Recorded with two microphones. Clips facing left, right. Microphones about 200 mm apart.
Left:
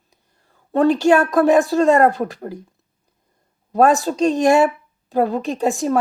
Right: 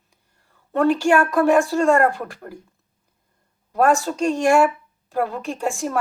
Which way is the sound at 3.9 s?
35° left (ahead or behind).